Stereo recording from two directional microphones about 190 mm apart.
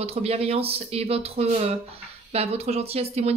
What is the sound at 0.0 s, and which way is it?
Speech, 30° right (ahead or behind).